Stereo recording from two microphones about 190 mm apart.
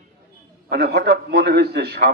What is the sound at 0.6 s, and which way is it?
A man's voice, 55° right (ahead or behind).